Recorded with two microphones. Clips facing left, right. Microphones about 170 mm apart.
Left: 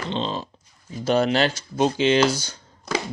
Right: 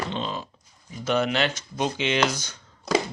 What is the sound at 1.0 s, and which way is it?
Speech, 35° left (ahead or behind).